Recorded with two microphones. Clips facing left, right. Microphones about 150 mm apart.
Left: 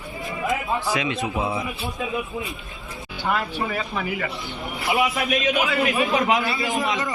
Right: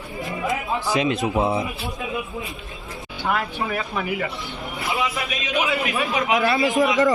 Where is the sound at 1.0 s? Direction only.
40° right (ahead or behind).